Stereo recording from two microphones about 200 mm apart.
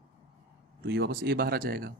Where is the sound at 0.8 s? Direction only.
60° right (ahead or behind).